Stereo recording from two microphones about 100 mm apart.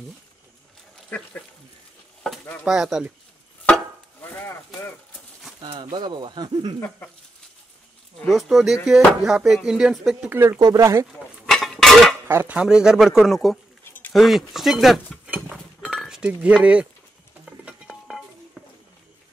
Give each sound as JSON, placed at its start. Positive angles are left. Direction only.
{"t": 2.6, "sound": "speech", "side_deg": -5}
{"t": 4.2, "sound": "a sound", "side_deg": 20}
{"t": 5.8, "sound": "speech", "side_deg": -50}
{"t": 8.3, "sound": "speech", "side_deg": 0}
{"t": 10.3, "sound": "speech", "side_deg": -20}
{"t": 11.5, "sound": "dishes", "side_deg": 5}
{"t": 12.3, "sound": "speech", "side_deg": -20}
{"t": 12.5, "sound": "speech", "side_deg": -5}
{"t": 15.2, "sound": "goat", "side_deg": -15}
{"t": 15.5, "sound": "a sound", "side_deg": 0}
{"t": 17.5, "sound": "dishes", "side_deg": -10}